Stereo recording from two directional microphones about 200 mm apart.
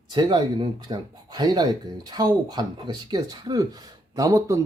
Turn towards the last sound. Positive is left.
turn(degrees=-15)  # may be behind; listen again after turning